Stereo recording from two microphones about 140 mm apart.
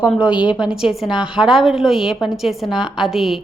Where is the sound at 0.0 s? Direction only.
10° right (ahead or behind).